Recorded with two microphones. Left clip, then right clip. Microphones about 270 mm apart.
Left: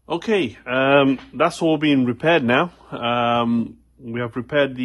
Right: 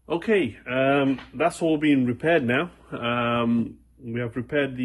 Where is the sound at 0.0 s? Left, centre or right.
Centre.